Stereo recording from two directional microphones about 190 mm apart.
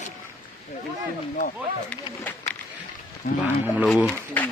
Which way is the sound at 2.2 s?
10° left (ahead or behind).